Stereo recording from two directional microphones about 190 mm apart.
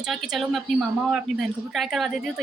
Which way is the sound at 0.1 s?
Centre (ahead or behind).